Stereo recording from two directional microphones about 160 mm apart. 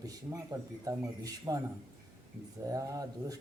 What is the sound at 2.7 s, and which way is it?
Speech, 20° right (ahead or behind).